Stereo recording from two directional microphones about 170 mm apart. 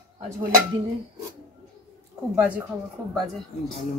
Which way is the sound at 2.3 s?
10° right (ahead or behind).